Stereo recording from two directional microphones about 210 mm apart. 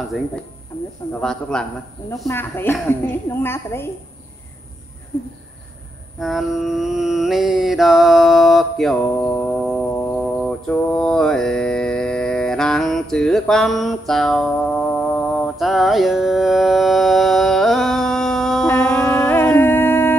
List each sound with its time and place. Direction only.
1.2 s a man's voice: 5° left (ahead or behind)
6.1 s mantra: centre (ahead or behind)